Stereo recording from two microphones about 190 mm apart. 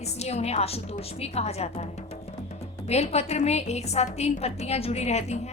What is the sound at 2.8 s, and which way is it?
A woman's voice, 35° left (ahead or behind).